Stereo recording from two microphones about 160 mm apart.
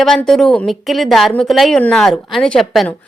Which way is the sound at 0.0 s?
5° left (ahead or behind).